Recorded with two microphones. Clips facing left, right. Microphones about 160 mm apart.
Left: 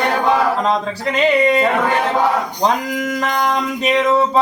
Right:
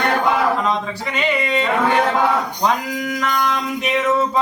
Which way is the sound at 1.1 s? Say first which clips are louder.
Left 7 dB; 35° left (ahead or behind).